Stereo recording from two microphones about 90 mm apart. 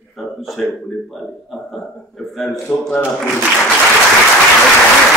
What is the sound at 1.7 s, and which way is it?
Speech, centre (ahead or behind).